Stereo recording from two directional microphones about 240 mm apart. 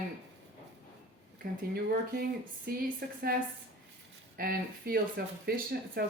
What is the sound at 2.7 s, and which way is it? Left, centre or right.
Speech, right.